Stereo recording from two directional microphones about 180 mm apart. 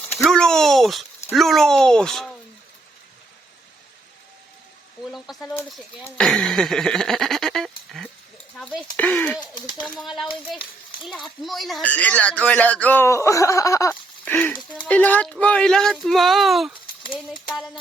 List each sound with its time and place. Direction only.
0.2 s speech: centre (ahead or behind)
5.1 s speech: centre (ahead or behind)
9.6 s speech: 25° left (ahead or behind)
9.8 s speech: centre (ahead or behind)